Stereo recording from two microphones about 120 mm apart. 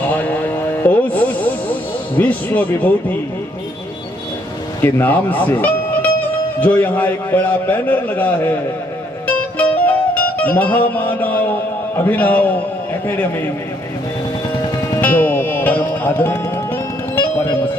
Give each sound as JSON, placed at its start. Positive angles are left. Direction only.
{"t": 0.1, "sound": "a sound", "side_deg": 15}
{"t": 2.1, "sound": "a man's voice", "side_deg": 15}
{"t": 4.8, "sound": "a man's voice", "side_deg": 15}
{"t": 9.2, "sound": "music", "side_deg": 15}
{"t": 11.9, "sound": "a man's voice", "side_deg": 15}
{"t": 15.0, "sound": "music", "side_deg": 15}